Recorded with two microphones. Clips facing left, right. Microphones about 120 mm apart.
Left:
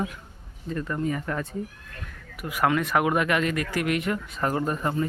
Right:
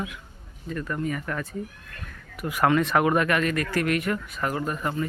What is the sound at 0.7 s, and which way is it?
Speech, 25° left (ahead or behind).